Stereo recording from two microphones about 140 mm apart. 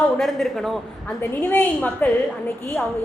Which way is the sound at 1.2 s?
10° left (ahead or behind).